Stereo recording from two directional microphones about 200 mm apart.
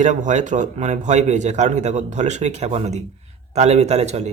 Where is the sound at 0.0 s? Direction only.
40° right (ahead or behind).